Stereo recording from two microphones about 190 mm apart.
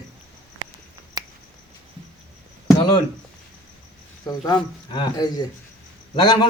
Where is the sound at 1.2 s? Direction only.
20° right (ahead or behind).